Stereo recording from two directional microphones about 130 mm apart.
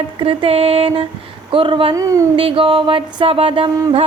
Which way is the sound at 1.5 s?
40° right (ahead or behind).